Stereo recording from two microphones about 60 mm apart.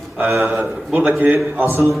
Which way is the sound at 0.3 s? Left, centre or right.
Right.